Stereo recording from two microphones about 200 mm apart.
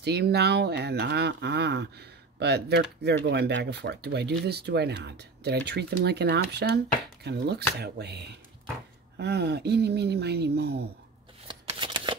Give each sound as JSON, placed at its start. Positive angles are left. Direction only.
{"t": 0.0, "sound": "speech", "side_deg": -55}
{"t": 11.4, "sound": "shuffling cards", "side_deg": -25}